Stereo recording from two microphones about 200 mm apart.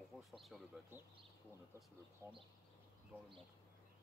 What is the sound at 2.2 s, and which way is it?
Speech, 15° left (ahead or behind).